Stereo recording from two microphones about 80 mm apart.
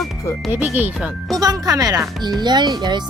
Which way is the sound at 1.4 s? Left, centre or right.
Right.